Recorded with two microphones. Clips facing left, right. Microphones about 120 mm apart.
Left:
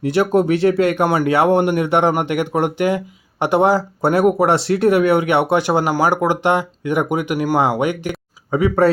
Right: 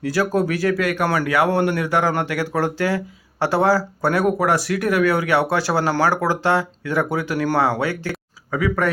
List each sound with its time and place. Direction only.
0.0 s speech: 25° left (ahead or behind)